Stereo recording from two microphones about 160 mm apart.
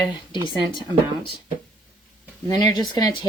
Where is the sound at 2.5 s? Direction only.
25° left (ahead or behind).